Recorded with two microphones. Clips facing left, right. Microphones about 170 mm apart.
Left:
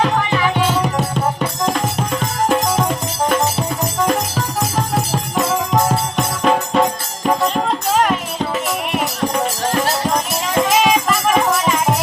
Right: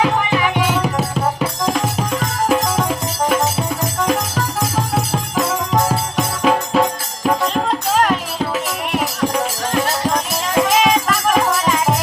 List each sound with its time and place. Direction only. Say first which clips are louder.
0.0 s music: even; 10° right (ahead or behind)